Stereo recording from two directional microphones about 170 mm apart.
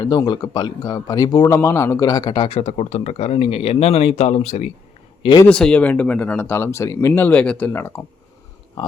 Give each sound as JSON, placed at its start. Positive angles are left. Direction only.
{"t": 0.0, "sound": "speech", "side_deg": 25}
{"t": 5.5, "sound": "speech", "side_deg": 5}